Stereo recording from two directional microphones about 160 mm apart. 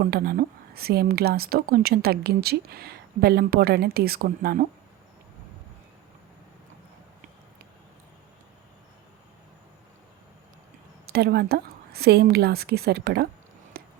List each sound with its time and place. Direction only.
0.0 s speech: 65° right (ahead or behind)
11.0 s a woman's voice: 80° right
13.7 s a sound: 75° right (ahead or behind)